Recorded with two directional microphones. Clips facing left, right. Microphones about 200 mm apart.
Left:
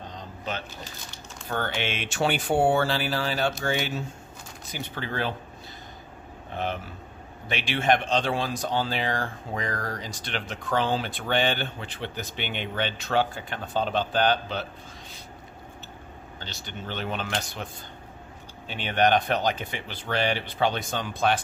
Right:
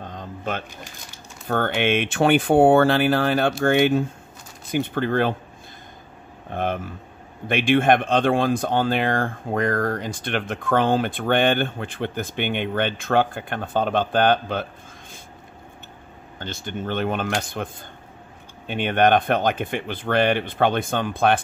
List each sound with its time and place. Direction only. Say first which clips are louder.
0.0 s speech: right 5 dB; 50° right (ahead or behind)
6.5 s speech: right 5 dB; 50° right (ahead or behind)
16.3 s speech: right 9 dB; 50° right (ahead or behind)
18.7 s speech: right 5 dB; 55° right (ahead or behind)